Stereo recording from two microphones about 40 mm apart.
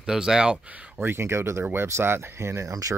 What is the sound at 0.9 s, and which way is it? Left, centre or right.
Speech, right.